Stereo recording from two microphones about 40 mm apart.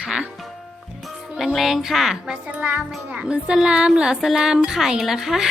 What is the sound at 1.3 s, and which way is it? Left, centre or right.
Speech, centre.